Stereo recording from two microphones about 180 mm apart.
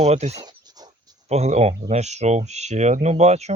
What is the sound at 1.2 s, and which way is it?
Speech, 35° right (ahead or behind).